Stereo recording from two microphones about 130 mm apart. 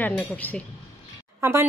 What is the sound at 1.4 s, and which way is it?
Speech, 20° right (ahead or behind).